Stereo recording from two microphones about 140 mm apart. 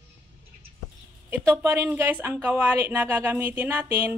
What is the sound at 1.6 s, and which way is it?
Speech, 15° right (ahead or behind).